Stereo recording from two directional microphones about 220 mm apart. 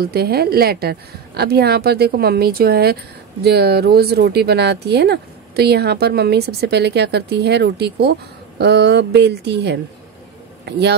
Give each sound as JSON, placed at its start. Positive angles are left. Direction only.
{"t": 0.0, "sound": "a man's voice", "side_deg": -45}